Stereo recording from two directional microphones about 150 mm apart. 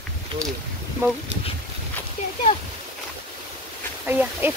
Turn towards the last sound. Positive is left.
turn(degrees=-10)  # may be behind; listen again after turning